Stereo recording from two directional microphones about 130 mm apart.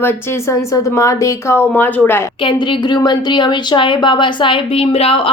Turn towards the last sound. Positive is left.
turn(degrees=50)  # may be behind; listen again after turning